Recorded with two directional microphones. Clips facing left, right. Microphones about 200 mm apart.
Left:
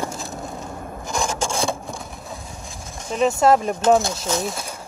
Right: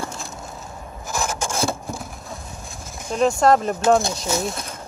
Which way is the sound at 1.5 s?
5° right (ahead or behind).